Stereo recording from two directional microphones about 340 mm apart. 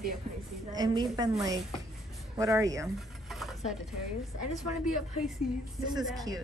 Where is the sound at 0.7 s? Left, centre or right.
Centre.